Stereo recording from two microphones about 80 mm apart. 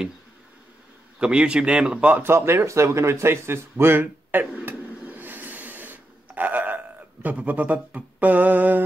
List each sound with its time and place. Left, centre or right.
1.2 s a man's voice: centre
2.2 s a sound: right
7.2 s speech: centre